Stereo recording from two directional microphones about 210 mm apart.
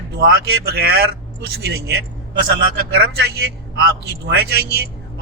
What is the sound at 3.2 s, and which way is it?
Speech, 50° right (ahead or behind).